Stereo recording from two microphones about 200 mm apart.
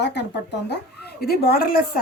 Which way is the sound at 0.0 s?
60° left (ahead or behind).